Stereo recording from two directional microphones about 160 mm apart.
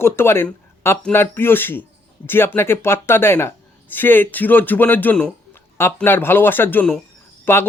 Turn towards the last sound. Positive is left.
turn(degrees=15)  # may be behind; listen again after turning